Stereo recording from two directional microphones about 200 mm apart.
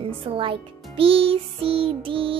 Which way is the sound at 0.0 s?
25° right (ahead or behind).